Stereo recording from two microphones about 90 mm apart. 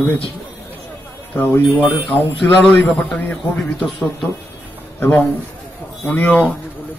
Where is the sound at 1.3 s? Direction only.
25° left (ahead or behind).